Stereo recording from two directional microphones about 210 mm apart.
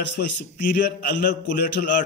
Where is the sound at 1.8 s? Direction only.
40° left (ahead or behind).